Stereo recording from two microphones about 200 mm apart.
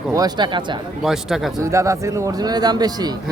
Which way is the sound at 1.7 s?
15° right (ahead or behind).